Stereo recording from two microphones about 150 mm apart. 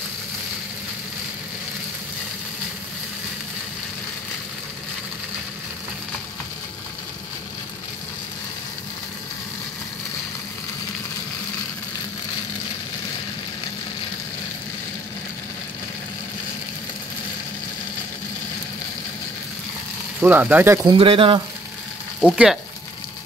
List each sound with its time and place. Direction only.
20.2 s speech: 10° right (ahead or behind)
20.8 s speech: 35° right (ahead or behind)
22.2 s speech: 5° right (ahead or behind)